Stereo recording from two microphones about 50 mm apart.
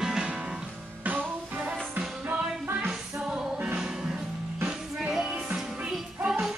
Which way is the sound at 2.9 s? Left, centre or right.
Centre.